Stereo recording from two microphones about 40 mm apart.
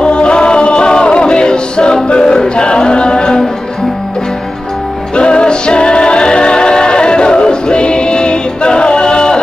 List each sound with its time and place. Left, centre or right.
0.0 s music: left
5.1 s music: left